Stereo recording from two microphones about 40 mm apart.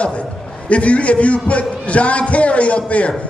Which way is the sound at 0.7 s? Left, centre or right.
Left.